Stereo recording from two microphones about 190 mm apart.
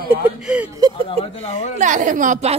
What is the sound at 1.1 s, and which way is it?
Speech, 30° left (ahead or behind).